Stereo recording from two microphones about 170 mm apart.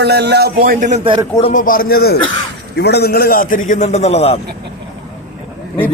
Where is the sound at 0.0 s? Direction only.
80° right; by 0.9 s 55° right (ahead or behind).